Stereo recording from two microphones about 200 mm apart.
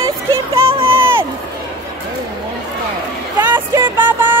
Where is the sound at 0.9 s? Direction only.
10° right (ahead or behind).